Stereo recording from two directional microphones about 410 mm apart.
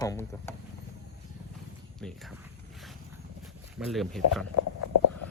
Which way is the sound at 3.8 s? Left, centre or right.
Centre.